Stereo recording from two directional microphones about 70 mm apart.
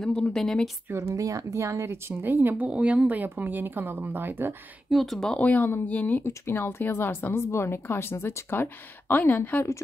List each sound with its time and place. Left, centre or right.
0.2 s speech: centre
0.9 s speech: right
4.9 s speech: centre
5.4 s speech: left
6.2 s speech: left